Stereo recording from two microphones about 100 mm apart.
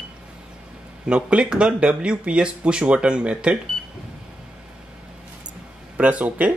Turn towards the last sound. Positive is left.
turn(degrees=-15)  # may be behind; listen again after turning